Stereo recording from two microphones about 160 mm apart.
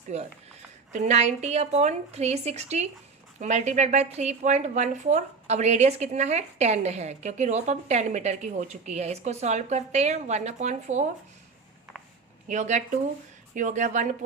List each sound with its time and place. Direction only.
0.1 s a woman's voice: 45° right (ahead or behind)
12.5 s a woman's voice: 50° right (ahead or behind)